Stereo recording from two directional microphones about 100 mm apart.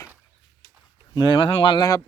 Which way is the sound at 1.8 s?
40° left (ahead or behind).